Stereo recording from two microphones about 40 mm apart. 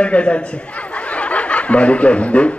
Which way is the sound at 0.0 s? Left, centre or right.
Left.